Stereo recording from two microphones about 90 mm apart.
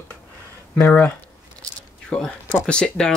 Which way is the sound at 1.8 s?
10° left (ahead or behind).